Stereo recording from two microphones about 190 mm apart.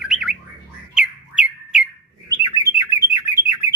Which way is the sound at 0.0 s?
5° right (ahead or behind).